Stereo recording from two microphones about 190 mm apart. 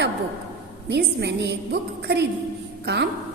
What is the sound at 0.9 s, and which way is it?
A woman's voice, 60° right (ahead or behind).